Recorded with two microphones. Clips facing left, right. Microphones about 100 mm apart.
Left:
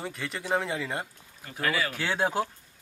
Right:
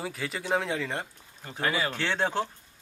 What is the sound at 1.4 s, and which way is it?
Speech, 25° right (ahead or behind).